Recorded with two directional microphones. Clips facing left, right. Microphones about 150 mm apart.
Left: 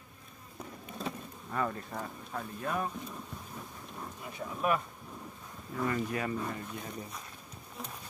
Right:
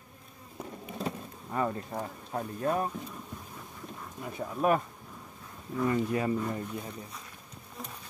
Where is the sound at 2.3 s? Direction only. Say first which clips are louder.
Right 7 dB; 35° right (ahead or behind).